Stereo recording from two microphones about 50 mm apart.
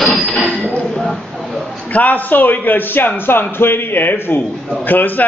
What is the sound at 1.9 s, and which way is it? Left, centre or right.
A man's voice, left.